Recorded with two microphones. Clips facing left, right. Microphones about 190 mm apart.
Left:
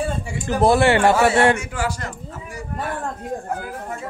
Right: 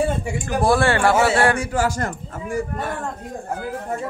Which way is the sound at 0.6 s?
20° left (ahead or behind).